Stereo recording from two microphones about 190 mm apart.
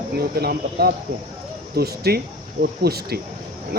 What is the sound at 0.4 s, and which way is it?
A man's voice, 55° right (ahead or behind).